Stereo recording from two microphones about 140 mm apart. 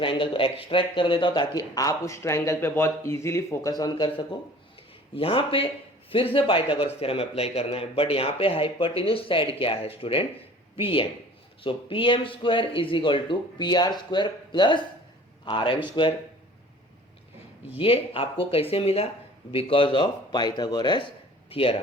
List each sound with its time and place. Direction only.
0.0 s speech: 40° left (ahead or behind)
17.7 s speech: 40° left (ahead or behind)